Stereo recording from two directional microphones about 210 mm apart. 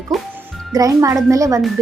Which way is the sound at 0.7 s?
15° right (ahead or behind).